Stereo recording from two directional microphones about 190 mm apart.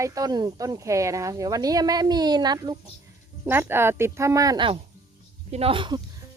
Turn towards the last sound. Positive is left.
turn(degrees=-25)  # may be behind; listen again after turning